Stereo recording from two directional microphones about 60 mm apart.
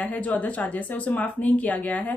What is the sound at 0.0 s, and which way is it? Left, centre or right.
Speech, left.